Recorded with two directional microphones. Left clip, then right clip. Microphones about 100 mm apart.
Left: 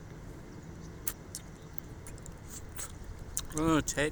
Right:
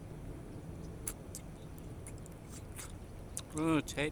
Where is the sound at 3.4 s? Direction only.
20° left (ahead or behind).